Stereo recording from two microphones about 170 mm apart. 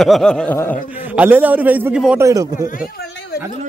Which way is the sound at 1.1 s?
10° right (ahead or behind).